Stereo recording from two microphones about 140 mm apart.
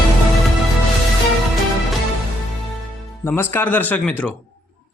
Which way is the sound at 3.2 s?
15° left (ahead or behind).